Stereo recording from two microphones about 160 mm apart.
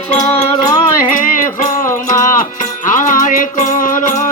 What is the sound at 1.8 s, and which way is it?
Music, 15° left (ahead or behind).